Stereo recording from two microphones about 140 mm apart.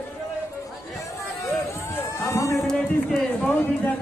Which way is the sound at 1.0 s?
20° left (ahead or behind).